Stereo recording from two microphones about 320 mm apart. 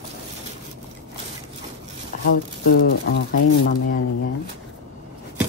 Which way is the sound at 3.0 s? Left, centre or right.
Left.